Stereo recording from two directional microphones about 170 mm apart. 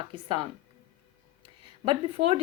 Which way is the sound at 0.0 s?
30° right (ahead or behind).